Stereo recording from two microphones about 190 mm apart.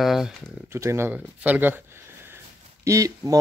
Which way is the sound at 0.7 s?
15° right (ahead or behind).